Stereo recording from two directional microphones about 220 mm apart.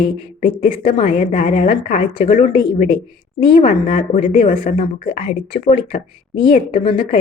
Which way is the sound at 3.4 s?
25° left (ahead or behind).